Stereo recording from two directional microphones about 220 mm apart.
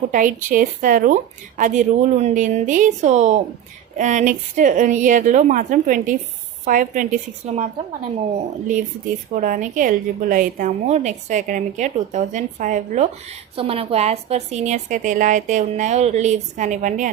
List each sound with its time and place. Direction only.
0.1 s a woman's voice: 35° right (ahead or behind)
9.4 s a woman's voice: 35° right (ahead or behind)